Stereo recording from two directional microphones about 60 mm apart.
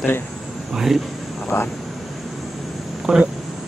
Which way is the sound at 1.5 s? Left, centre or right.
Left.